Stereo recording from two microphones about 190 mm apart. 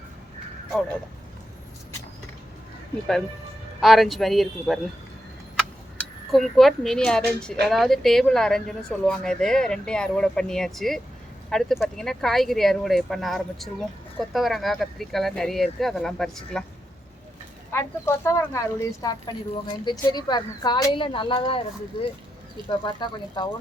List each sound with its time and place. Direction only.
3.8 s speech: centre (ahead or behind)
6.0 s speech: centre (ahead or behind)
17.7 s speech: 10° left (ahead or behind); by 21.6 s 30° left (ahead or behind)
22.8 s speech: 25° left (ahead or behind)